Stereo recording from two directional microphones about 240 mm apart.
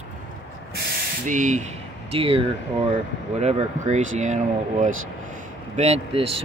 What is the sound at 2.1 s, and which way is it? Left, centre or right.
Speech, right.